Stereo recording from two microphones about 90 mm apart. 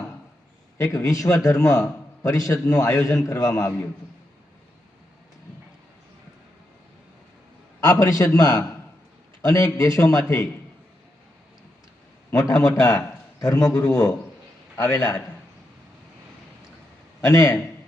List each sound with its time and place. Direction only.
0.8 s a man's voice: 40° left (ahead or behind)
7.9 s a man's voice: 35° left (ahead or behind)
12.3 s a man's voice: 40° left (ahead or behind)
17.2 s a man's voice: 35° left (ahead or behind)